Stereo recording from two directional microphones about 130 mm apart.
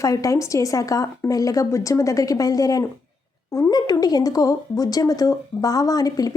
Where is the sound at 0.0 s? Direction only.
25° left (ahead or behind).